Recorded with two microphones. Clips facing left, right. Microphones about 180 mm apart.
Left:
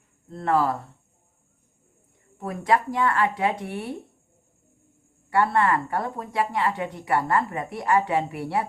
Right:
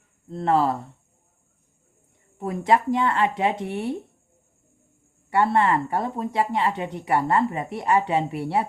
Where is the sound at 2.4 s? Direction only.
25° right (ahead or behind).